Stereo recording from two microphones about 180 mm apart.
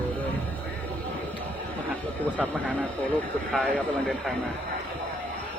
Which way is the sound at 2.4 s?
10° left (ahead or behind).